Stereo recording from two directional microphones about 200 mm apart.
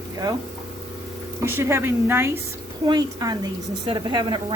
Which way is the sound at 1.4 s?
15° right (ahead or behind).